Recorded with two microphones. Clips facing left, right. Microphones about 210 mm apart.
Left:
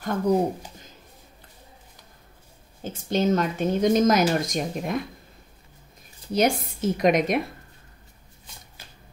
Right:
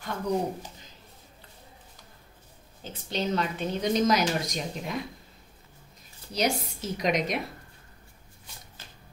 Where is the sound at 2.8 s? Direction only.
45° left (ahead or behind).